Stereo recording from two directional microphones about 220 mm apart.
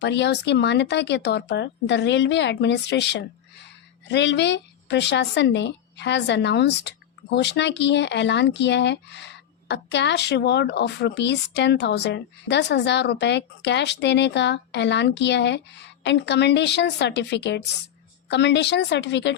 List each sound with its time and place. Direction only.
0.0 s a woman's voice: 50° left (ahead or behind)